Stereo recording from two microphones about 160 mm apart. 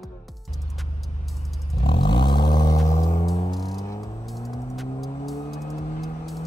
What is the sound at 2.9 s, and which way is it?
Music, 50° left (ahead or behind).